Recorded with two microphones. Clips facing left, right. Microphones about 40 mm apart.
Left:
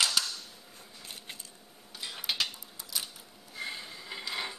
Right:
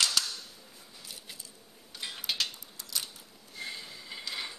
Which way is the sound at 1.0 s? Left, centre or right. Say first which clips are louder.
Left 2 dB; left.